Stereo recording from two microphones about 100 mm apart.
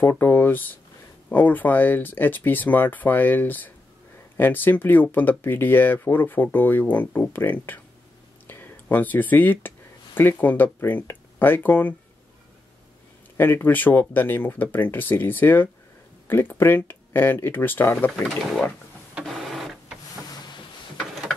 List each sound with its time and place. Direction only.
0.0 s speech: 20° left (ahead or behind)
13.4 s speech: 20° left (ahead or behind)
17.9 s speech: 10° left (ahead or behind)
19.1 s printer: centre (ahead or behind)